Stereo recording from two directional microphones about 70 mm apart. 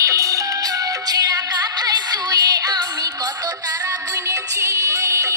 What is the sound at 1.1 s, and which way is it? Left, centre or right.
Music, right.